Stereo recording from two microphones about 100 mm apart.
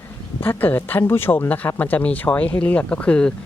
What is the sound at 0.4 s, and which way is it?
Speech, 20° left (ahead or behind).